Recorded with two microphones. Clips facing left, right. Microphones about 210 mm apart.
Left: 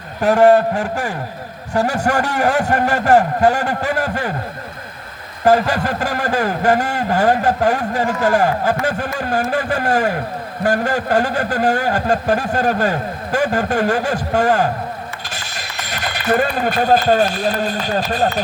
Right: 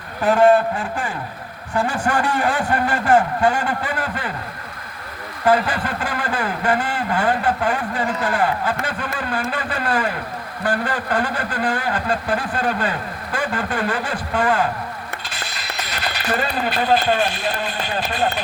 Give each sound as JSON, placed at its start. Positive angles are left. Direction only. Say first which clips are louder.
{"t": 0.2, "sound": "speech", "louder": "left 3 dB", "side_deg": 40}
{"t": 5.5, "sound": "speech", "louder": "left 4 dB", "side_deg": 40}